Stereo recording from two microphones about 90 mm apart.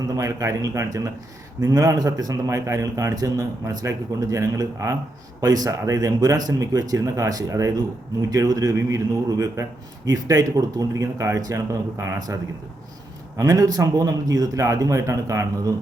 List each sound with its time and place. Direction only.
0.2 s a man's voice: 35° right (ahead or behind)